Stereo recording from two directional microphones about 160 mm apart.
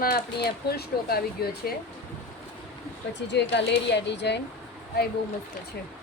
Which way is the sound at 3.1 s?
90° left.